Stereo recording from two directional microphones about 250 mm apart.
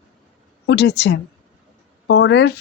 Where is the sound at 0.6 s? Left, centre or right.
Left.